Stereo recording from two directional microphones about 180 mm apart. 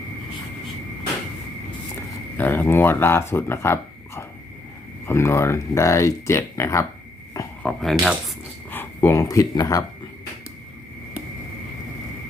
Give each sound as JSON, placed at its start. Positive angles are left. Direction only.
{"t": 2.4, "sound": "speech", "side_deg": 10}
{"t": 7.6, "sound": "speech", "side_deg": 5}
{"t": 8.7, "sound": "speech", "side_deg": 10}